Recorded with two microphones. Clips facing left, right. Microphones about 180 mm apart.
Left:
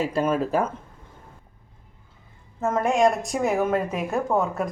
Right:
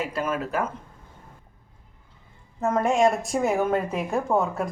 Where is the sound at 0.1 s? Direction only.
30° left (ahead or behind).